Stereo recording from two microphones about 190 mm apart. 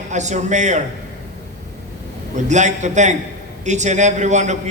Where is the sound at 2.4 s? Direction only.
40° right (ahead or behind).